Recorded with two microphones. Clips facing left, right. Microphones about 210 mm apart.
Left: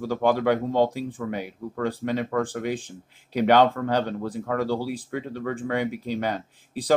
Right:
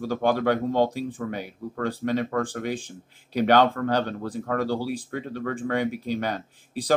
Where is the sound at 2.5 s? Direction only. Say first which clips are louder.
Left 1 dB; 40° right (ahead or behind).